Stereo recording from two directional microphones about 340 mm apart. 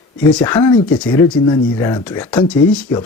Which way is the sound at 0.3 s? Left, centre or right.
Centre.